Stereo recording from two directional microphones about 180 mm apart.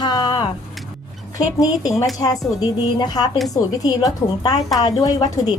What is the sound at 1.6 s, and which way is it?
Speech, 20° left (ahead or behind).